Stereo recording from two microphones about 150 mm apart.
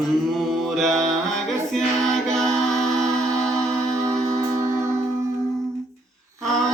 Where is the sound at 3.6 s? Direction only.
5° left (ahead or behind).